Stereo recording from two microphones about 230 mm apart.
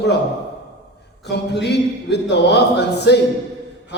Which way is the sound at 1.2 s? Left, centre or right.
Left.